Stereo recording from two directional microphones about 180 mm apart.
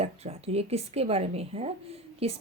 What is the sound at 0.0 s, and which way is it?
Speech, 35° right (ahead or behind).